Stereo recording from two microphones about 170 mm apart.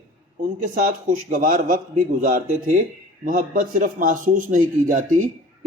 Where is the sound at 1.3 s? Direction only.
55° right (ahead or behind).